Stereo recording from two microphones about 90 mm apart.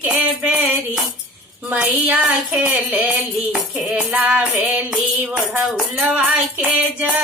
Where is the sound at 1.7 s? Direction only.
15° right (ahead or behind).